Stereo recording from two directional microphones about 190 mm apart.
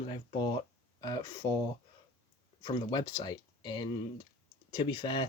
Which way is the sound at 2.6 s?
20° left (ahead or behind).